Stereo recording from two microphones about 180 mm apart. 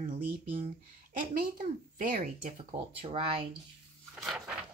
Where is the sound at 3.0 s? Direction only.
30° right (ahead or behind).